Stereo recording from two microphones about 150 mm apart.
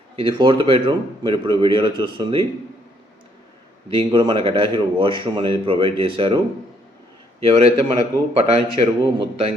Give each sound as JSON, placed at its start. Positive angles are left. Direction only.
{"t": 0.2, "sound": "speech", "side_deg": -35}
{"t": 3.8, "sound": "speech", "side_deg": -35}
{"t": 7.4, "sound": "speech", "side_deg": -45}